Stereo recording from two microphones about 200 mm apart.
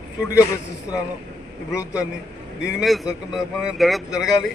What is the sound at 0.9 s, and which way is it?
Speech, 20° left (ahead or behind).